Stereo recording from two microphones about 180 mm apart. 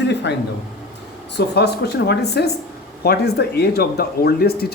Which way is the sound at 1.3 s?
65° left (ahead or behind).